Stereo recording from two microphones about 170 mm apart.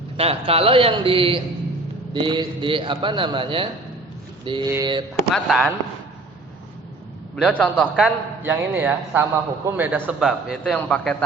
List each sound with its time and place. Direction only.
0.2 s a man's voice: 35° right (ahead or behind)
5.3 s a man's voice: centre (ahead or behind)
7.4 s a man's voice: 5° left (ahead or behind)
7.9 s a man's voice: 10° right (ahead or behind)